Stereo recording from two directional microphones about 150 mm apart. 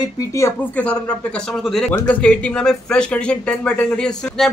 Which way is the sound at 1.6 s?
Centre (ahead or behind).